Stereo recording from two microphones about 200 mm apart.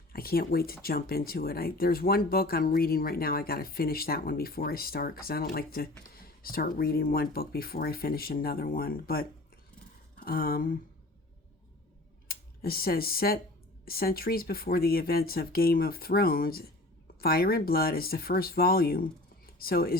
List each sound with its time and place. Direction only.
0.1 s speech: 50° left (ahead or behind)
12.3 s speech: 50° left (ahead or behind)